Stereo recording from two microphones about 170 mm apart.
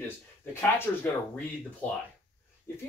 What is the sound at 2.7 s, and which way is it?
Speech, 15° left (ahead or behind).